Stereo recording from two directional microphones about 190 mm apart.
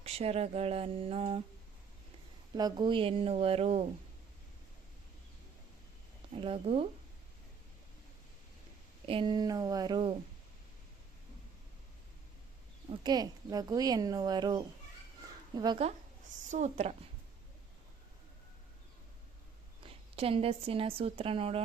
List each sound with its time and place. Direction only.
0.0 s speech: 30° right (ahead or behind)
2.6 s speech: 20° right (ahead or behind)
6.3 s speech: 30° right (ahead or behind)
9.0 s speech: 25° right (ahead or behind)
12.9 s speech: 20° right (ahead or behind)
16.5 s speech: 40° right (ahead or behind)
20.1 s speech: 30° right (ahead or behind)